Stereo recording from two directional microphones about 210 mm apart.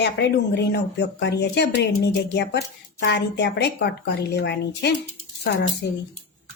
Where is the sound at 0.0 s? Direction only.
55° left (ahead or behind).